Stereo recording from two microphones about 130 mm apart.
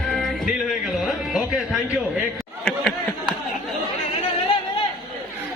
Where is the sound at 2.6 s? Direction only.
5° left (ahead or behind).